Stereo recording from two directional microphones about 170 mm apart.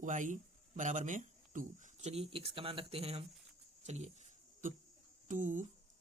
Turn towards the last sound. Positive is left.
turn(degrees=-50)  # may be behind; listen again after turning